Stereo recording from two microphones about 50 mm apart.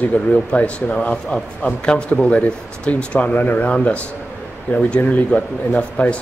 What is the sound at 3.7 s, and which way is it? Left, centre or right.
Speech, left.